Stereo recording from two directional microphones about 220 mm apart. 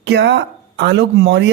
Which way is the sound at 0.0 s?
50° right (ahead or behind).